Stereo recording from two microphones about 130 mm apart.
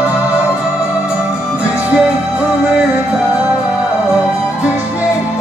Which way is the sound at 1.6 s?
10° right (ahead or behind).